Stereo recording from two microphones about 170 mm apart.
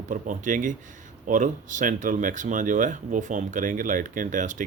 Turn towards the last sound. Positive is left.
turn(degrees=-50)  # may be behind; listen again after turning